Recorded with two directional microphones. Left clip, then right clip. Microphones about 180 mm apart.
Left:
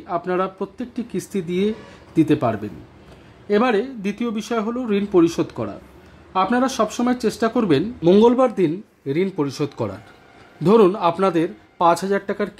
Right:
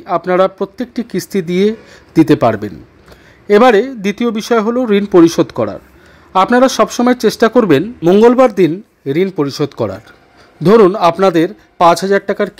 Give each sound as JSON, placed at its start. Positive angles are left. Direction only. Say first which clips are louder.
{"t": 0.0, "sound": "a man's voice", "louder": "right 11 dB", "side_deg": -30}